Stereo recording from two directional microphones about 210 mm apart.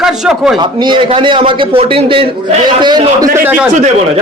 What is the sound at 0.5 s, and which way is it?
A man's voice, 20° right (ahead or behind).